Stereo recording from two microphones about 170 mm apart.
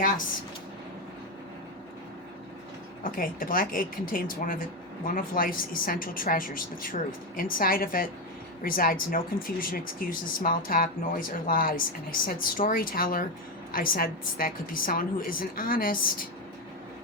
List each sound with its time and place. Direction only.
3.0 s speech: 55° left (ahead or behind)